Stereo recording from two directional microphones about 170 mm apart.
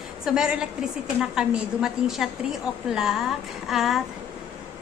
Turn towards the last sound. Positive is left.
turn(degrees=0)  # may be behind; listen again after turning